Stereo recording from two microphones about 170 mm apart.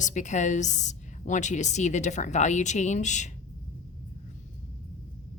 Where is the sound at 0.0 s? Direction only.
45° left (ahead or behind).